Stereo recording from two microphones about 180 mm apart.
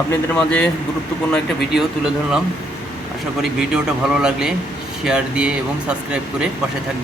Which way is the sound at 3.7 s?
5° right (ahead or behind).